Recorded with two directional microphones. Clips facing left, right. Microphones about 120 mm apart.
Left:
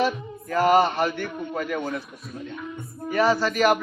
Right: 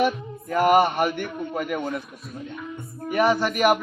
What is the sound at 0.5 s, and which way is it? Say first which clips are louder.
Speech: right 1 dB; 15° right (ahead or behind).